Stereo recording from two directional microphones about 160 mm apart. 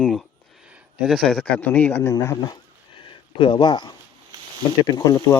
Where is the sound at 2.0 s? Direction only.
20° left (ahead or behind).